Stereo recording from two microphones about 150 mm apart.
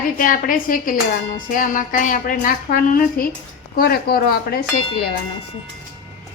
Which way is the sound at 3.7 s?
90° left.